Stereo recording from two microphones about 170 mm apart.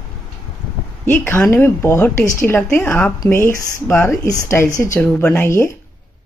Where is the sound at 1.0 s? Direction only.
10° left (ahead or behind).